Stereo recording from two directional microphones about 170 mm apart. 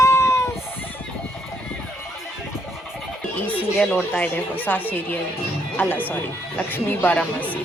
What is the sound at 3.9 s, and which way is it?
Speech, 10° left (ahead or behind).